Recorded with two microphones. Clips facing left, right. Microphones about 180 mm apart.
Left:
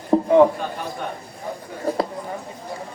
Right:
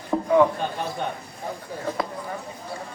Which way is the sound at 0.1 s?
30° left (ahead or behind).